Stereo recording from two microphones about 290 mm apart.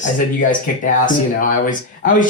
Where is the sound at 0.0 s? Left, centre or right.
Left.